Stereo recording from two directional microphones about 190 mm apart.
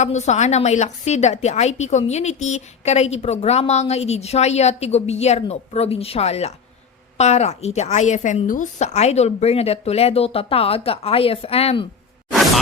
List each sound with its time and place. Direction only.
0.0 s a woman's voice: 35° left (ahead or behind)